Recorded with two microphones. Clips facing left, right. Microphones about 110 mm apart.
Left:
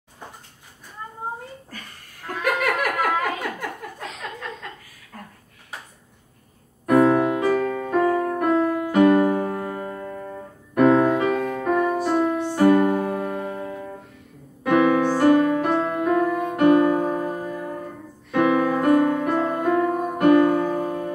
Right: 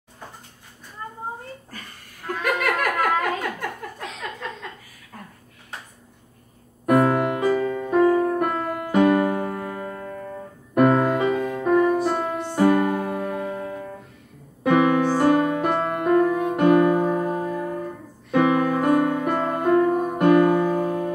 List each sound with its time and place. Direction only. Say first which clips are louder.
2.2 s giggle: even; 5° left (ahead or behind)
6.9 s music: left 2 dB; 5° right (ahead or behind)
9.6 s music: left 1 dB; 10° left (ahead or behind)
10.7 s music: left 1 dB; 5° right (ahead or behind)
14.6 s music: even; 5° right (ahead or behind)